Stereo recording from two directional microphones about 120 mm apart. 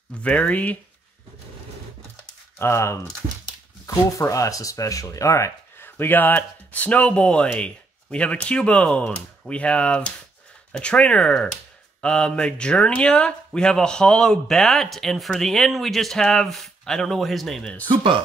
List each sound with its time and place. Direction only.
0.2 s speech: 10° left (ahead or behind)
2.6 s speech: 20° left (ahead or behind); by 17.6 s centre (ahead or behind)
17.8 s speech: 45° right (ahead or behind)